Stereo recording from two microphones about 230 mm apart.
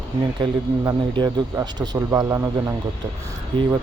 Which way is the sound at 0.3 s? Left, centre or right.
Right.